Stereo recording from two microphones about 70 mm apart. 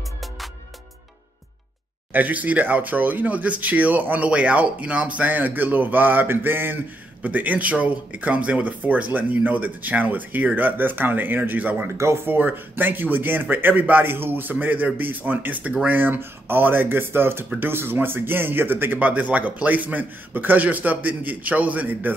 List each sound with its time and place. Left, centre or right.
2.1 s speech: right